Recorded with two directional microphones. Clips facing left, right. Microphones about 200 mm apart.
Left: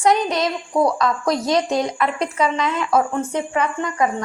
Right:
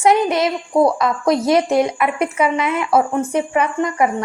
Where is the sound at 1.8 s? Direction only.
10° right (ahead or behind).